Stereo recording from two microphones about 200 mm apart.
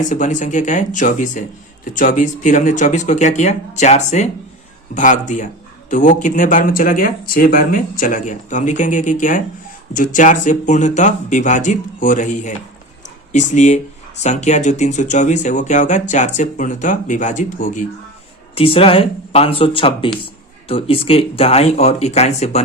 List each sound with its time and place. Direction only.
0.0 s speech: 40° left (ahead or behind)
18.5 s speech: 30° left (ahead or behind)